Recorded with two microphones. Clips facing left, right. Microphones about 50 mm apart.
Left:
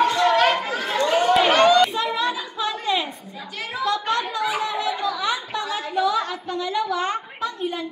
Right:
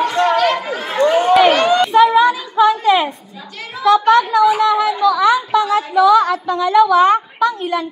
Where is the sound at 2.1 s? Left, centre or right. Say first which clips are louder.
Right 12 dB; right.